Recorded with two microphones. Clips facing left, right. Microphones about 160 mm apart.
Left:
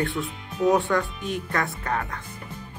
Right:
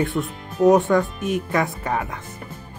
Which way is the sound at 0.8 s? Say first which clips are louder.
Right 6 dB; 20° right (ahead or behind).